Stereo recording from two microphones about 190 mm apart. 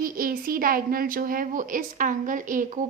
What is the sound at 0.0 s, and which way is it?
A woman's voice, 50° right (ahead or behind).